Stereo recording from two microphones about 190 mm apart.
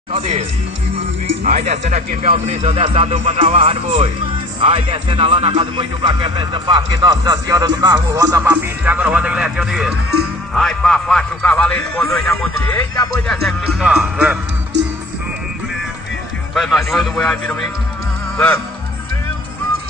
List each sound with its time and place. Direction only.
0.1 s a man's voice: 30° right (ahead or behind); by 13.1 s 15° left (ahead or behind)
13.3 s a man's voice: centre (ahead or behind)
16.5 s a man's voice: centre (ahead or behind)